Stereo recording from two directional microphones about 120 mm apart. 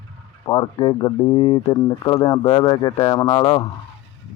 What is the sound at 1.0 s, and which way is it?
Speech, 30° left (ahead or behind).